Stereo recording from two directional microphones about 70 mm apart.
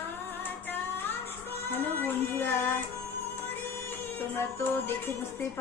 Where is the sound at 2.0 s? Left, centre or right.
Left.